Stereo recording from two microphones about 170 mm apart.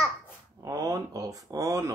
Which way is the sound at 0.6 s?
20° right (ahead or behind).